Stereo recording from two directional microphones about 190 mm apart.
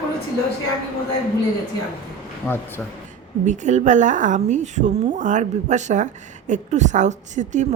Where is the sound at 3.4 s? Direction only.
40° right (ahead or behind).